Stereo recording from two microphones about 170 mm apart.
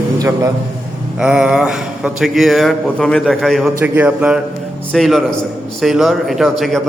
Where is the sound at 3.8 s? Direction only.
10° right (ahead or behind).